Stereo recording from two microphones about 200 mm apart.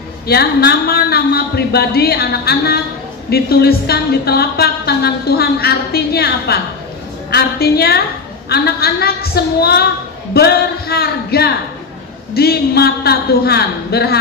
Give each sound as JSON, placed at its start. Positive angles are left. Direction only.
{"t": 0.3, "sound": "speech", "side_deg": 55}